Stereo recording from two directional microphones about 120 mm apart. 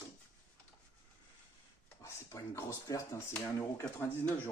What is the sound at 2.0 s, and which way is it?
Speech, 25° left (ahead or behind).